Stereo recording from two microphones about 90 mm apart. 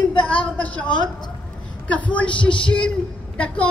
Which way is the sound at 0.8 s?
55° left (ahead or behind).